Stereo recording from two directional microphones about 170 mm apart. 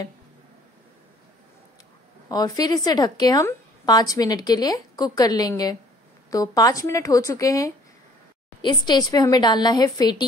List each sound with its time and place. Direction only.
2.2 s a woman's voice: 20° left (ahead or behind)